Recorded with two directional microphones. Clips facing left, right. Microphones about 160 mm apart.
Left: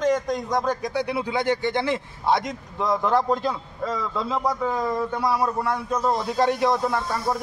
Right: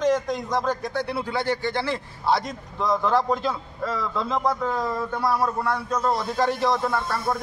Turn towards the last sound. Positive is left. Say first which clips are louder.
# left 1 dB
turn(degrees=10)  # may be behind; listen again after turning